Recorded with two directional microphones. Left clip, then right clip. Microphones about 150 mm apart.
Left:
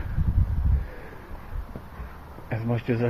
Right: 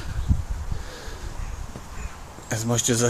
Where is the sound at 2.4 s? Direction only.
25° right (ahead or behind).